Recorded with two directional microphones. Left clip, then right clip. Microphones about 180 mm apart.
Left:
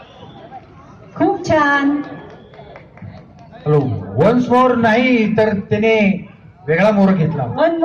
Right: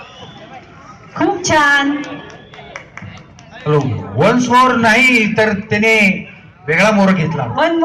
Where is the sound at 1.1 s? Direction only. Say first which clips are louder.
Right 1 dB; 20° right (ahead or behind).